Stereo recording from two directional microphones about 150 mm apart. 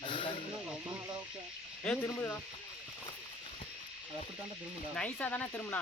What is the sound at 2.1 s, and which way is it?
Speech, 20° left (ahead or behind).